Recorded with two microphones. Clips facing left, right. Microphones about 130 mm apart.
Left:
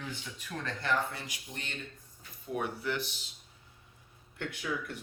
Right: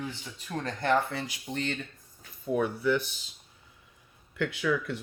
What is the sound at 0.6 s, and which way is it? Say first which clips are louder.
Speech: right 6 dB; 50° right (ahead or behind).